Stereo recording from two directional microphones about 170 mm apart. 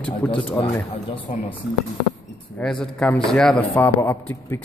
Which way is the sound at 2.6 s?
5° left (ahead or behind).